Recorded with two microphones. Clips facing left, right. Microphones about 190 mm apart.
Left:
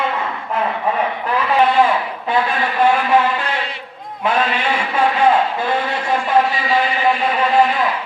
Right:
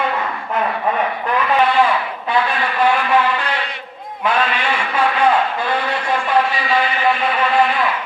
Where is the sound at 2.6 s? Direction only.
25° left (ahead or behind).